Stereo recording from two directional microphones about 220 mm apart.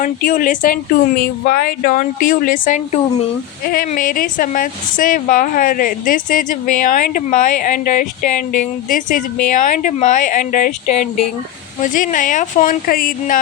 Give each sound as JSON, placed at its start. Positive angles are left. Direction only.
{"t": 0.0, "sound": "a woman's voice", "side_deg": 40}